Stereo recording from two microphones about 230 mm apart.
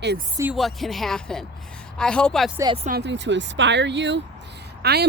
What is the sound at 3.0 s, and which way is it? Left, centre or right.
Speech, right.